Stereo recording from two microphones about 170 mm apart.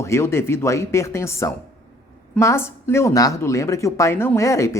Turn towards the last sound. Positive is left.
turn(degrees=15)  # may be behind; listen again after turning